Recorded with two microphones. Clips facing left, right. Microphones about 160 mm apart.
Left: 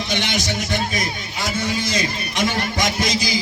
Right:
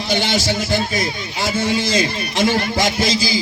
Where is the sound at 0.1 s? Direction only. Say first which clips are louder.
Right 6 dB; 30° right (ahead or behind).